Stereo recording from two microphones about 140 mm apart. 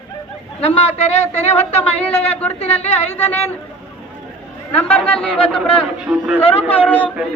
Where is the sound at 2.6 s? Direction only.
50° left (ahead or behind).